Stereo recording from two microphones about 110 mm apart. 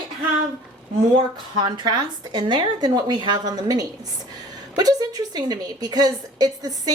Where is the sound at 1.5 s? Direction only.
45° right (ahead or behind).